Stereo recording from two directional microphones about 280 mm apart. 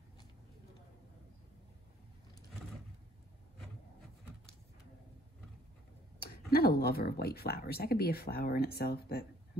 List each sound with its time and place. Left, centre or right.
6.1 s speech: left